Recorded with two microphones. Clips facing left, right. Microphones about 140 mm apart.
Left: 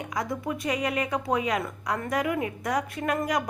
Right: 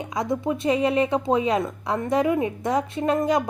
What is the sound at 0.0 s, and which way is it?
A woman's voice, 25° right (ahead or behind).